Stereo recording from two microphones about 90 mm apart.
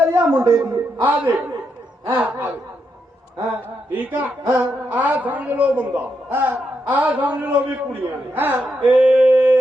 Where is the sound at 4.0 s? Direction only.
20° right (ahead or behind).